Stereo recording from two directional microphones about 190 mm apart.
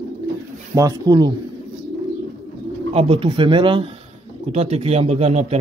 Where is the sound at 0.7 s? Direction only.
20° right (ahead or behind).